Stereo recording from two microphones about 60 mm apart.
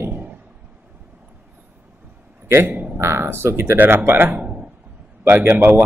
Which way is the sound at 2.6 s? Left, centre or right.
Right.